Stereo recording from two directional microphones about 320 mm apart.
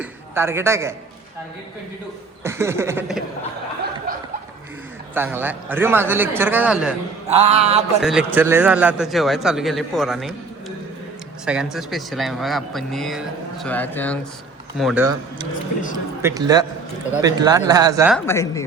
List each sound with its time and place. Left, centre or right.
0.0 s a man's voice: centre
2.4 s a man's voice: centre
5.1 s a man's voice: centre
7.3 s mantra: centre
8.0 s speech: centre
11.4 s a man's voice: centre
18.3 s a woman's voice: centre